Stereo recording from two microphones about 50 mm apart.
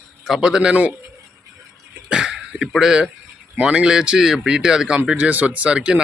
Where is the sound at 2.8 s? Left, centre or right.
Centre.